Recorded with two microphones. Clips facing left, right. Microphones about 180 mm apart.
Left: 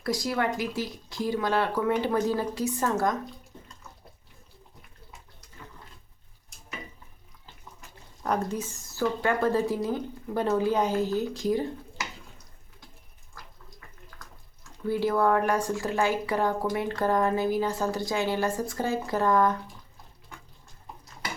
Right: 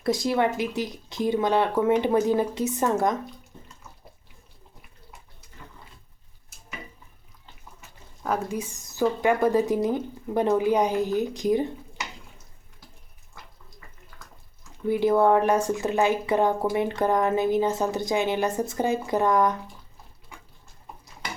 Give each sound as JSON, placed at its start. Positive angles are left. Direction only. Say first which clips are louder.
{"t": 0.0, "sound": "speech", "louder": "right 5 dB", "side_deg": -25}
{"t": 7.8, "sound": "speech", "louder": "right 1 dB", "side_deg": -5}
{"t": 14.8, "sound": "speech", "louder": "right 4 dB", "side_deg": -20}